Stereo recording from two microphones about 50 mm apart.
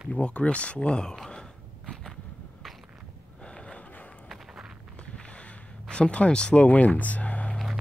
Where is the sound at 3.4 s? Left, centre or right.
Left.